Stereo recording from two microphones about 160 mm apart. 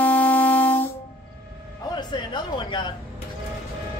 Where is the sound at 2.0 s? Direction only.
30° left (ahead or behind).